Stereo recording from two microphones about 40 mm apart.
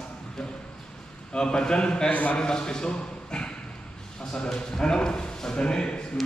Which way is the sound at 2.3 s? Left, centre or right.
Left.